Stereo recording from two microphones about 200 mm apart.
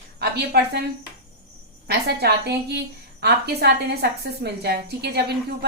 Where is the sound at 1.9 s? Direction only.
55° right (ahead or behind).